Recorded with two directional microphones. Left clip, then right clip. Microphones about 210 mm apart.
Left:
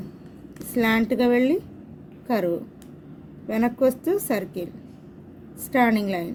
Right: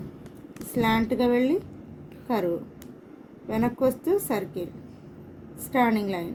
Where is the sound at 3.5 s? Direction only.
55° left (ahead or behind).